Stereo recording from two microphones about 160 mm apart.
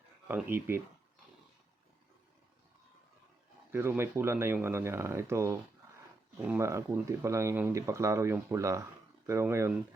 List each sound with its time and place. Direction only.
0.3 s speech: 15° right (ahead or behind)
3.7 s speech: 15° right (ahead or behind)